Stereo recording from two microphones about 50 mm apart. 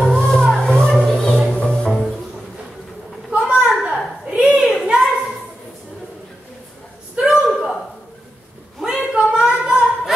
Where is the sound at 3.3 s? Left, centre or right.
Right.